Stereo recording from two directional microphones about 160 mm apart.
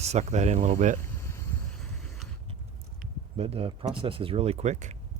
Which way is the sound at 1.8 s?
Centre (ahead or behind).